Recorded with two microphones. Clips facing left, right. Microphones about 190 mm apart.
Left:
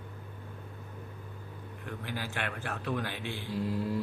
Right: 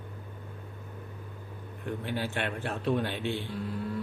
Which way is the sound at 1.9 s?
25° right (ahead or behind).